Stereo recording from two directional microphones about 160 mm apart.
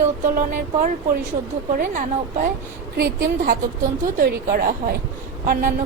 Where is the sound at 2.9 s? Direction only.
75° right (ahead or behind).